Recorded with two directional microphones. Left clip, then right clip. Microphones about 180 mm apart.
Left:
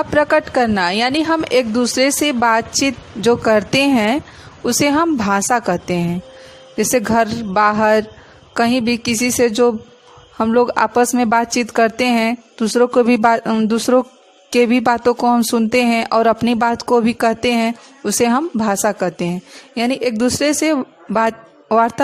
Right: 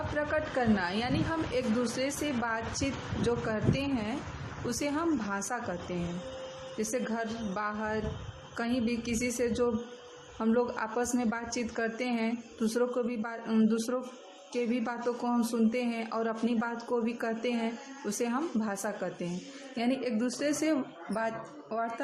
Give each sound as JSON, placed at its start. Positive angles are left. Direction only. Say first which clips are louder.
{"t": 0.2, "sound": "speech", "louder": "left 17 dB", "side_deg": 55}
{"t": 6.7, "sound": "a woman's voice", "louder": "left 19 dB", "side_deg": 55}